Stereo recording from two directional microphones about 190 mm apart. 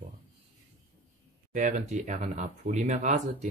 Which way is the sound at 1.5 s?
40° right (ahead or behind).